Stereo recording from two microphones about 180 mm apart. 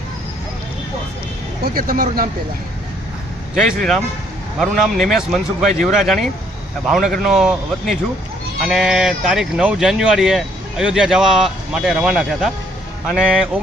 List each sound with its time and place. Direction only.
1.6 s speech: 55° right (ahead or behind)
3.8 s speech: centre (ahead or behind)